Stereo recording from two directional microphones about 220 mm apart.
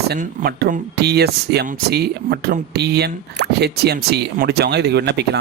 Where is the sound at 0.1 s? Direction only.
45° right (ahead or behind).